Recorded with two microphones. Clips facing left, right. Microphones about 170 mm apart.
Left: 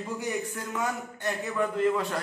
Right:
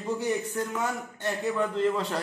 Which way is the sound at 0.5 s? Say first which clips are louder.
Right 2 dB; 20° right (ahead or behind).